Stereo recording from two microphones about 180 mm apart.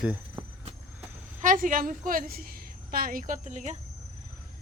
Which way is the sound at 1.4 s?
50° right (ahead or behind).